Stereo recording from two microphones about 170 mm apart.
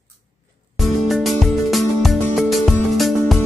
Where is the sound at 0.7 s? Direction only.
Centre (ahead or behind).